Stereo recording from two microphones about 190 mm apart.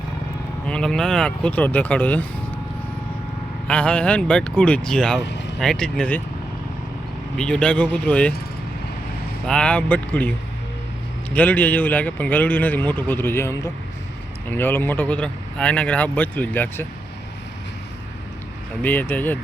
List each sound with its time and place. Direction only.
0.7 s speech: 5° left (ahead or behind)
3.7 s speech: 5° left (ahead or behind)
5.2 s vehicle: 65° left (ahead or behind)
5.5 s speech: 5° left (ahead or behind)
7.3 s speech: 5° left (ahead or behind)
9.5 s speech: 5° left (ahead or behind)
11.3 s speech: 10° left (ahead or behind)
18.8 s speech: 10° left (ahead or behind)